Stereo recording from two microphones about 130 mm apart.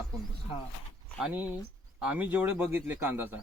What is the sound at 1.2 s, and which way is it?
Speech, 10° right (ahead or behind).